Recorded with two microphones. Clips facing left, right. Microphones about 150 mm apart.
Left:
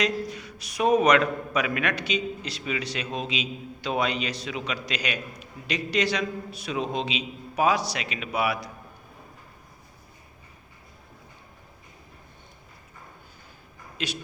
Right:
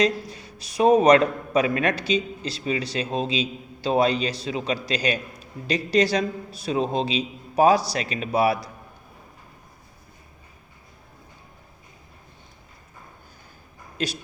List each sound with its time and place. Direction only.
0.0 s a man's voice: 30° right (ahead or behind)
14.0 s a man's voice: 40° right (ahead or behind)